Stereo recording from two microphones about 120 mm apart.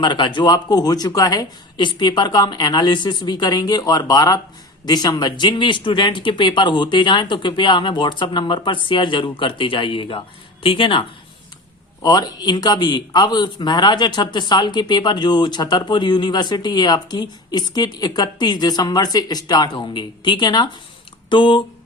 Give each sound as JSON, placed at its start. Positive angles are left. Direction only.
{"t": 0.0, "sound": "a man's voice", "side_deg": 40}
{"t": 12.0, "sound": "a man's voice", "side_deg": 35}